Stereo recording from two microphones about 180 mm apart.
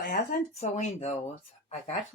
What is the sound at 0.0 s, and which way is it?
Speech, 50° left (ahead or behind).